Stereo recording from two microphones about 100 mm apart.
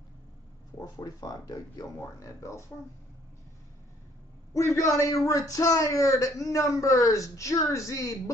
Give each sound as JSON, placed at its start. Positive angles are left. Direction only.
{"t": 0.7, "sound": "speech", "side_deg": 35}
{"t": 4.6, "sound": "speech", "side_deg": 30}